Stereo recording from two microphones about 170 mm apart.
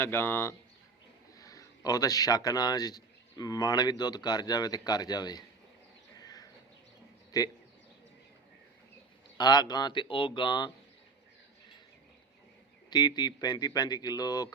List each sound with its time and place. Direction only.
0.0 s speech: 15° left (ahead or behind)
6.1 s a sound: 20° left (ahead or behind)
9.4 s speech: 25° left (ahead or behind)
12.9 s speech: 25° left (ahead or behind)